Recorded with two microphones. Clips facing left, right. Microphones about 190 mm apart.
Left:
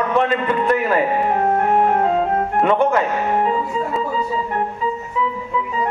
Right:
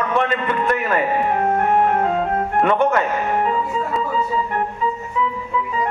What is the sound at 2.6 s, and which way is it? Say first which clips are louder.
Speech: left 1 dB; 25° left (ahead or behind).